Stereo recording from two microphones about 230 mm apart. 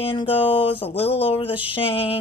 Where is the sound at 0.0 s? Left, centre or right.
Left.